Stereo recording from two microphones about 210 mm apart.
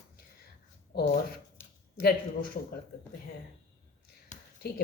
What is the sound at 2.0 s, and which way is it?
Speech, 45° left (ahead or behind).